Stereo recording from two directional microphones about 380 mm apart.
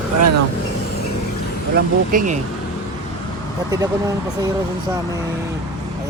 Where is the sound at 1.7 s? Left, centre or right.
Right.